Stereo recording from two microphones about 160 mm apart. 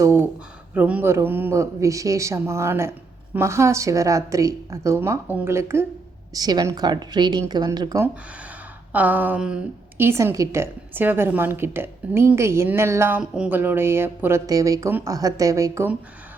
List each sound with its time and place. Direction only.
0.0 s a sound: 15° right (ahead or behind)
0.7 s a woman's voice: 10° right (ahead or behind)
8.0 s a woman's voice: 10° right (ahead or behind)